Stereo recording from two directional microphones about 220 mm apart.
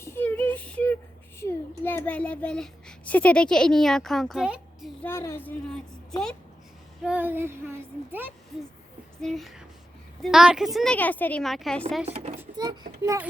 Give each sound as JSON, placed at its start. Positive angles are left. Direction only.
{"t": 0.0, "sound": "child singing", "side_deg": 10}
{"t": 1.4, "sound": "a child's voice", "side_deg": 10}
{"t": 5.0, "sound": "a woman's voice", "side_deg": 10}
{"t": 12.0, "sound": "a child's voice", "side_deg": -30}
{"t": 12.4, "sound": "speech", "side_deg": -20}